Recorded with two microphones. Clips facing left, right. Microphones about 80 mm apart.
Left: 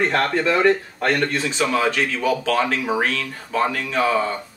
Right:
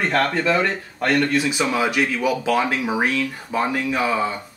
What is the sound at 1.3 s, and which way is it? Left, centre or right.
Speech, centre.